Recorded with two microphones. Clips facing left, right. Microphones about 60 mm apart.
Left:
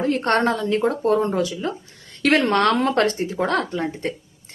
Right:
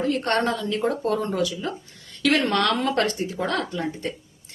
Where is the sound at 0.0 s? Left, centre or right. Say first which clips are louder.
Left 3 dB; left.